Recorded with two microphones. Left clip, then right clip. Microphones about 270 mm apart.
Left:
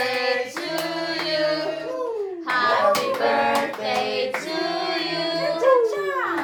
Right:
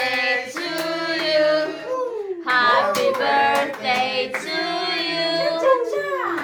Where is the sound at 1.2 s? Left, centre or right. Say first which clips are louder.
Right 6 dB; centre.